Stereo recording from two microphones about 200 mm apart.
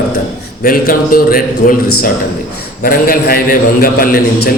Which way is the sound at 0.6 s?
45° left (ahead or behind).